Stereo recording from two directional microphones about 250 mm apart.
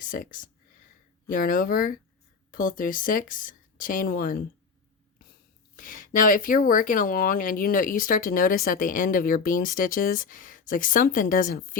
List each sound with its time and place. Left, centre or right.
0.0 s speech: left
5.7 s speech: left